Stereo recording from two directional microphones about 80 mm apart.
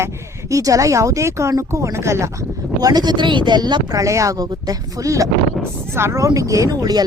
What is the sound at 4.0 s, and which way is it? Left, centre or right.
A woman's voice, right.